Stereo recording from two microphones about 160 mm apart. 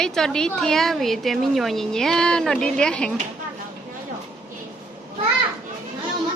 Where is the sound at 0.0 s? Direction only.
5° left (ahead or behind).